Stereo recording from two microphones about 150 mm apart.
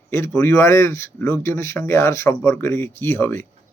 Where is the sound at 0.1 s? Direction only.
20° left (ahead or behind).